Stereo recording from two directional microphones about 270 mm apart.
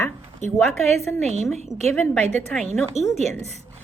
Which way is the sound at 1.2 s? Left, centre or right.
Right.